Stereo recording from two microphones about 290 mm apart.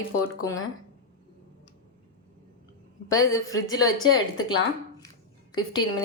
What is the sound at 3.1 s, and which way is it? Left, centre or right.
A woman's voice, centre.